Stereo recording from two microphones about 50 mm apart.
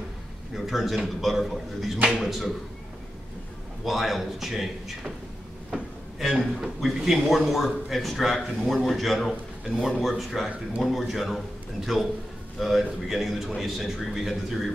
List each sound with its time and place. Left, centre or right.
0.6 s a man's voice: centre
3.8 s a man's voice: centre
5.7 s a sound: centre
6.4 s a man's voice: centre